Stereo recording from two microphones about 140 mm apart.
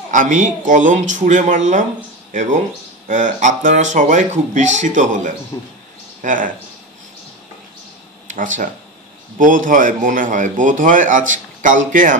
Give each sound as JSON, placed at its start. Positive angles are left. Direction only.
{"t": 0.1, "sound": "speech", "side_deg": -60}
{"t": 3.1, "sound": "speech", "side_deg": -65}
{"t": 5.5, "sound": "speech", "side_deg": 30}
{"t": 6.2, "sound": "a man's voice", "side_deg": -70}
{"t": 8.3, "sound": "a man's voice", "side_deg": -65}